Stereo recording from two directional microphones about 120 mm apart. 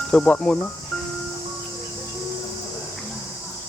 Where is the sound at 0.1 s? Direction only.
10° left (ahead or behind).